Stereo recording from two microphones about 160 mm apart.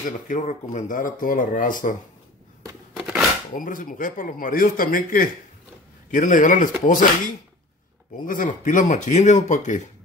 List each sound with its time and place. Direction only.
0.3 s a man's voice: 50° left (ahead or behind)
3.5 s a man's voice: 55° left (ahead or behind)